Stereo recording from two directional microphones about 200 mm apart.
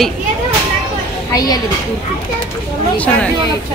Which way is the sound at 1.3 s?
20° left (ahead or behind).